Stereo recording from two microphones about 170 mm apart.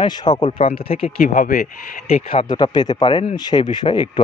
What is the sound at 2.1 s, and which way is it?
Speech, 35° left (ahead or behind).